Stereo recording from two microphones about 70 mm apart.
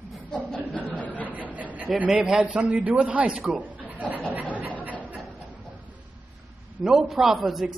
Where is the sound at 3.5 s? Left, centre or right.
Right.